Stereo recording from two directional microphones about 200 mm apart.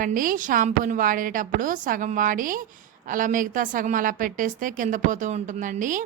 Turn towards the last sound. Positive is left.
turn(degrees=-40)  # may be behind; listen again after turning